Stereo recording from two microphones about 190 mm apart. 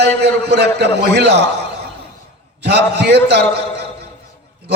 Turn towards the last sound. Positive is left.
turn(degrees=-60)  # may be behind; listen again after turning